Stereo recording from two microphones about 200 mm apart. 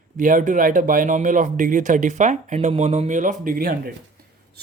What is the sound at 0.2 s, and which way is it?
Speech, 40° right (ahead or behind).